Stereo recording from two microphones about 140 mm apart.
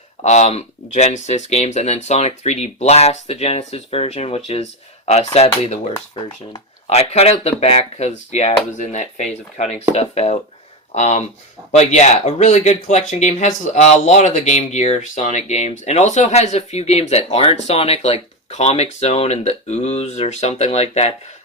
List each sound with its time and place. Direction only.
0.2 s speech: 50° left (ahead or behind)
6.1 s speech: 30° left (ahead or behind)
6.9 s speech: 50° left (ahead or behind)